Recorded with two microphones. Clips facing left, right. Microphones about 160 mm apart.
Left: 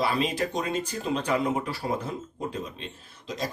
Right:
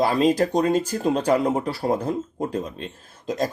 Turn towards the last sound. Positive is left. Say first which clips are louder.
# right 8 dB
turn(degrees=-50)  # may be behind; listen again after turning